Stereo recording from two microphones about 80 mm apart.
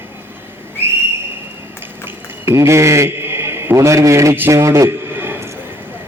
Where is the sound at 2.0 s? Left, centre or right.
Right.